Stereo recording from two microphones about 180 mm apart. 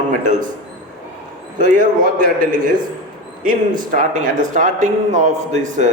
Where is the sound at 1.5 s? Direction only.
45° right (ahead or behind).